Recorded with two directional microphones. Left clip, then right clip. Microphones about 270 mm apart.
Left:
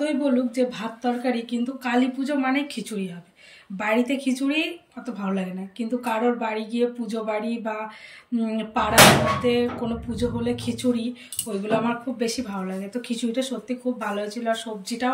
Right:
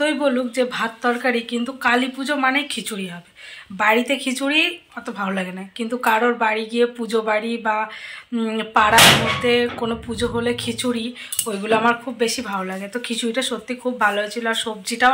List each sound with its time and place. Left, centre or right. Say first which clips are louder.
0.0 s a woman's voice: right 4 dB; centre